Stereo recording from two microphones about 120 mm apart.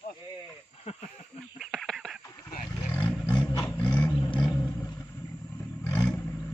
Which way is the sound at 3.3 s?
35° left (ahead or behind).